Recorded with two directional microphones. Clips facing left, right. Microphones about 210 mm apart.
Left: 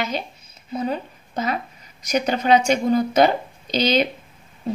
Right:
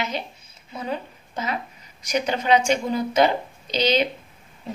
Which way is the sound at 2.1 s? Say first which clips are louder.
Left 3 dB; 45° left (ahead or behind).